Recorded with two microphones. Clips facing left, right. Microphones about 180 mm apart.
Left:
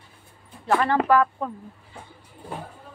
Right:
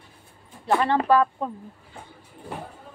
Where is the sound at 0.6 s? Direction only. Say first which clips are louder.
Even; 15° right (ahead or behind).